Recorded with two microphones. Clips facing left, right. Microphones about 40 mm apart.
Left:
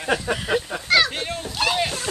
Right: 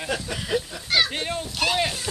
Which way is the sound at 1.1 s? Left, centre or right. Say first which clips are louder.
Even; centre.